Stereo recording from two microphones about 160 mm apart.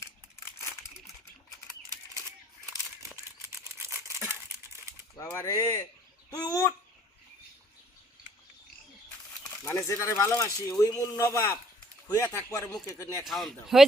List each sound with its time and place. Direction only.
3.9 s a sound: 20° left (ahead or behind)
5.1 s speech: 15° left (ahead or behind)
9.6 s speech: 20° left (ahead or behind)
13.2 s speech: centre (ahead or behind)